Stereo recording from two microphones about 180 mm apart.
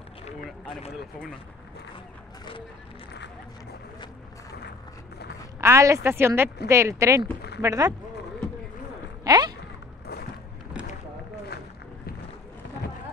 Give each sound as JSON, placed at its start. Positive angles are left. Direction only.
{"t": 5.6, "sound": "speech", "side_deg": -15}
{"t": 9.2, "sound": "speech", "side_deg": -20}